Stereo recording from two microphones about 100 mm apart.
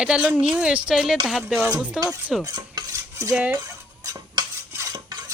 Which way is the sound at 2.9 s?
30° right (ahead or behind).